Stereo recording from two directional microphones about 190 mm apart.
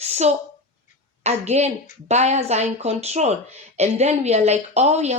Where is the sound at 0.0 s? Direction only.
35° right (ahead or behind).